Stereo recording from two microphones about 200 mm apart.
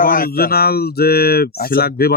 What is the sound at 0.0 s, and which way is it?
Speech, 45° left (ahead or behind).